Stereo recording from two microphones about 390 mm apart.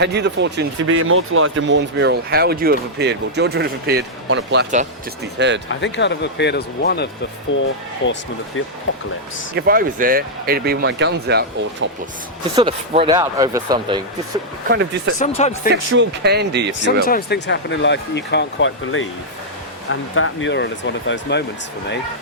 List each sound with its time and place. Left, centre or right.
0.0 s speech: right
5.6 s speech: left
9.6 s speech: right
12.5 s speech: centre
14.7 s speech: right
15.2 s speech: centre
15.7 s speech: right
17.1 s speech: left